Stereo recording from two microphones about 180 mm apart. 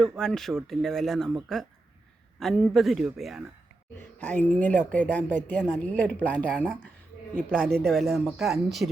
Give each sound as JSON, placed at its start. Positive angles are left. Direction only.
{"t": 0.0, "sound": "speech", "side_deg": 5}
{"t": 3.9, "sound": "speech", "side_deg": 10}